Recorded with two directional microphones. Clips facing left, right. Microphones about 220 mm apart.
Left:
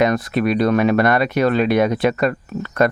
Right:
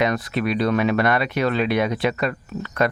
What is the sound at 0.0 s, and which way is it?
Speech, 45° left (ahead or behind).